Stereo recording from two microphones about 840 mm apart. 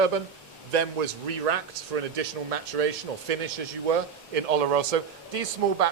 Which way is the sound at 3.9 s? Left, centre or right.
Right.